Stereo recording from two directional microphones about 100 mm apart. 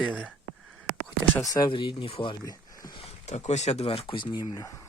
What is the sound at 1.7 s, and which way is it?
Speech, 60° left (ahead or behind).